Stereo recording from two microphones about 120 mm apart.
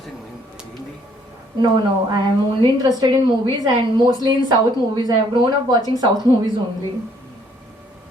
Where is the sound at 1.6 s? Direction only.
35° right (ahead or behind).